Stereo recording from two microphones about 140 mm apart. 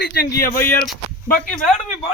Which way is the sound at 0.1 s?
90° left.